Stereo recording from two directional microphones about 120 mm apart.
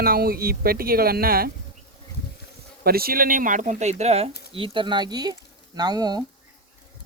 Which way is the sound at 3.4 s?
85° right.